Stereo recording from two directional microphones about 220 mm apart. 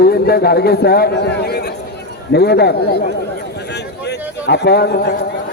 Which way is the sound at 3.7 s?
50° left (ahead or behind).